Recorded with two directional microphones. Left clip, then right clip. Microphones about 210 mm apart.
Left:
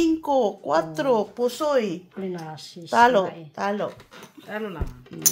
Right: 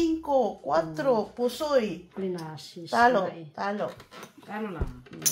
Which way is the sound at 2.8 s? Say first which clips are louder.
Left 4 dB; 45° left (ahead or behind).